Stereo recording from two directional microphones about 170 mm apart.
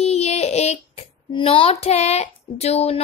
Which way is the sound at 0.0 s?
40° left (ahead or behind).